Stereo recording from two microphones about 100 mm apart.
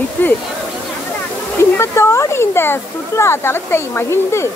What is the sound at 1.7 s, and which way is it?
Speech, 25° left (ahead or behind).